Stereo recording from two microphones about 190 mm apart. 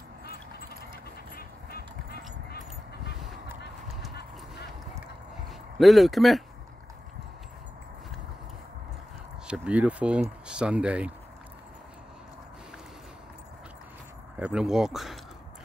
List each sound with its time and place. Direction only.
0.2 s quack: 55° left (ahead or behind)
4.1 s clip-clop: 60° left (ahead or behind)
5.8 s speech: centre (ahead or behind)
9.5 s speech: 5° right (ahead or behind)
14.4 s speech: 5° right (ahead or behind)